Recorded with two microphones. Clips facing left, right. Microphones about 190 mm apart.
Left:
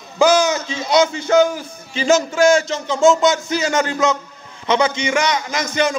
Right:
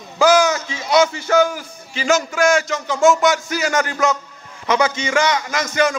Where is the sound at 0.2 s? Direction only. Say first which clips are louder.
Even; 20° left (ahead or behind).